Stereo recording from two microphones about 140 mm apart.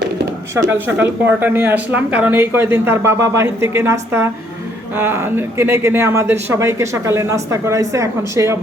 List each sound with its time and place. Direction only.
0.5 s speech: 20° right (ahead or behind)